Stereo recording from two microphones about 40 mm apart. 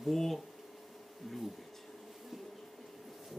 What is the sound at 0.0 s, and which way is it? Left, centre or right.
Speech, centre.